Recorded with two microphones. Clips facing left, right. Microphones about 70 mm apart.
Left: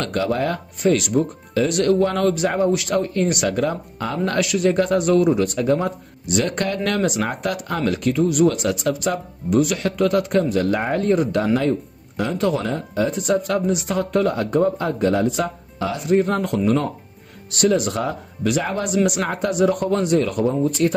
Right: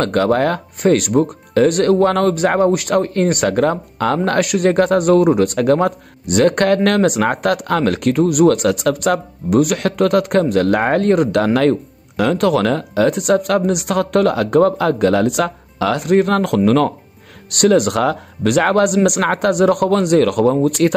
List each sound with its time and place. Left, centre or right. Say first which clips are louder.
0.0 s speech: right 7 dB; right
12.2 s speech: right 6 dB; right
17.5 s speech: right 6 dB; right